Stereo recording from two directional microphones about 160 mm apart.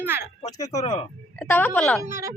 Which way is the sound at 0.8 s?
45° left (ahead or behind).